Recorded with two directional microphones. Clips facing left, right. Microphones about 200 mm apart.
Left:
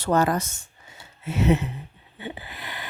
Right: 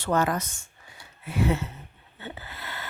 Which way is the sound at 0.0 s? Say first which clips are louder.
Left 3 dB; 35° left (ahead or behind).